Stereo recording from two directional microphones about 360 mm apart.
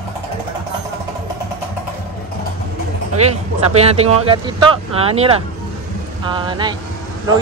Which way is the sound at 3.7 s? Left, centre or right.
Centre.